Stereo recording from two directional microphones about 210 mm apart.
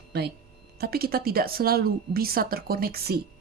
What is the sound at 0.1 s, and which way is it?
A woman's voice, 50° right (ahead or behind).